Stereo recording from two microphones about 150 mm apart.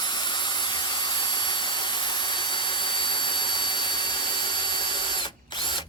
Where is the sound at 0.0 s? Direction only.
30° left (ahead or behind).